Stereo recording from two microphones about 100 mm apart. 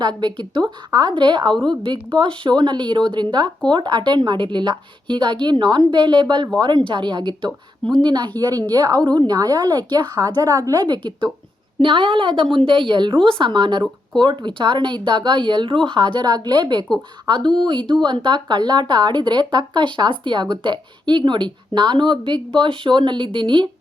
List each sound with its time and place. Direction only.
0.0 s speech: 45° right (ahead or behind)
8.4 s a woman's voice: 40° right (ahead or behind); by 23.6 s 55° right (ahead or behind)